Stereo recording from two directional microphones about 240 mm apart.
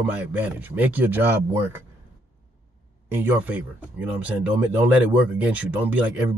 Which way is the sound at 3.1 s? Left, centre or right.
Centre.